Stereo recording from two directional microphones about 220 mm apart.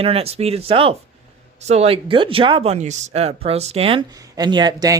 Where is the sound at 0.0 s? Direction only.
25° right (ahead or behind).